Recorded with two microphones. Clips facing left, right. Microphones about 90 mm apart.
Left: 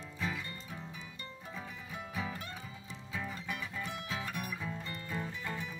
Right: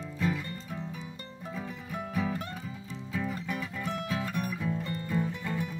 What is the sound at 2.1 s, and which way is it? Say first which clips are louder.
Music: right 8 dB; centre (ahead or behind).